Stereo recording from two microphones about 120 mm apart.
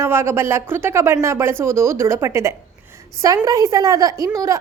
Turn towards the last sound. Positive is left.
turn(degrees=-30)  # may be behind; listen again after turning